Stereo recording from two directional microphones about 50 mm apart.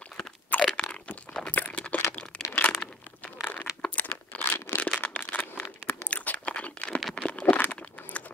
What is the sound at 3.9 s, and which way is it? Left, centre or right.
Tearing, left.